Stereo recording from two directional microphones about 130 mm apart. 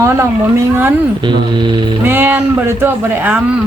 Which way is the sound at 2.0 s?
15° right (ahead or behind).